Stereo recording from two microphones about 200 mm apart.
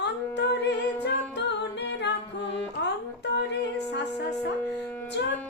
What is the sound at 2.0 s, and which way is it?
Music, 60° left (ahead or behind).